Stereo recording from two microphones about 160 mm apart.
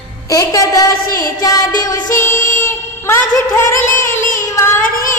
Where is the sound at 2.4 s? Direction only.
55° left (ahead or behind).